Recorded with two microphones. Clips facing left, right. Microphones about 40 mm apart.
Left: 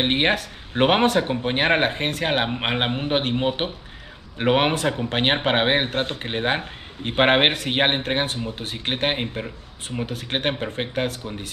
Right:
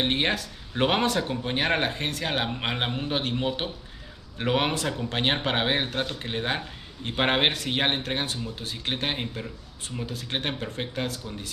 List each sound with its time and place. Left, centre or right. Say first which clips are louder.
0.0 s speech: left 5 dB; left